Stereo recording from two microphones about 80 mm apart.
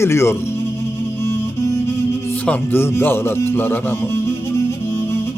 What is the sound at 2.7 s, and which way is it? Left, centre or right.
Speech, left.